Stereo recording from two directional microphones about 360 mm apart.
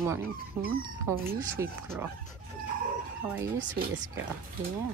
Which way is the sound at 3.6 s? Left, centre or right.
Right.